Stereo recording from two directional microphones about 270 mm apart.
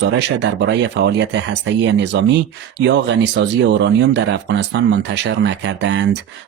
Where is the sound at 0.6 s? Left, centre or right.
Right.